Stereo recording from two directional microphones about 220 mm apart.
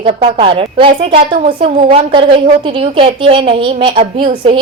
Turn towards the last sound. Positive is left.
turn(degrees=-25)  # may be behind; listen again after turning